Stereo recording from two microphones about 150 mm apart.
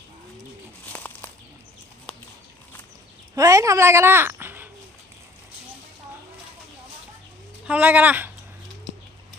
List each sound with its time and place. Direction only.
0.9 s a sound: 10° left (ahead or behind)
3.3 s speech: 20° right (ahead or behind)
7.7 s speech: 10° right (ahead or behind)